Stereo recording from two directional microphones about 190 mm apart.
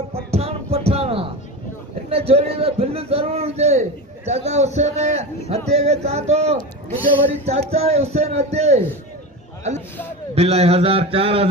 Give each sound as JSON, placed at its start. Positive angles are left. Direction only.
{"t": 0.3, "sound": "music", "side_deg": -30}
{"t": 2.0, "sound": "a man's voice", "side_deg": -30}
{"t": 10.3, "sound": "a man's voice", "side_deg": -35}